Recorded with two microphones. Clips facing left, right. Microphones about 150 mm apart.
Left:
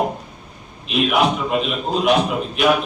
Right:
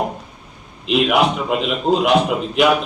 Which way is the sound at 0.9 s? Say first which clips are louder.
Right 2 dB; 90° right.